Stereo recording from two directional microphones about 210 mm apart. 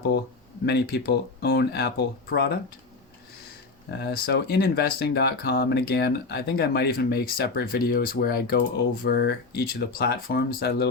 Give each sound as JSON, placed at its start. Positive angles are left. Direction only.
{"t": 0.6, "sound": "speech", "side_deg": 50}
{"t": 3.9, "sound": "speech", "side_deg": 50}